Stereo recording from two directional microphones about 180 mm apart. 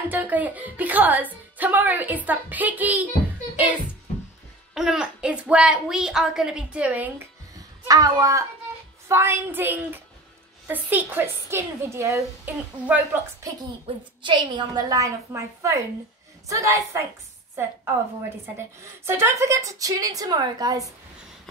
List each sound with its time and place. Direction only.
0.1 s a child's voice: 10° right (ahead or behind)
4.7 s a child's voice: 5° right (ahead or behind)
13.9 s a woman's voice: 30° right (ahead or behind)
18.8 s a woman's voice: 15° right (ahead or behind)